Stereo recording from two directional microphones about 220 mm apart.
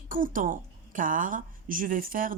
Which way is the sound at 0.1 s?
40° right (ahead or behind).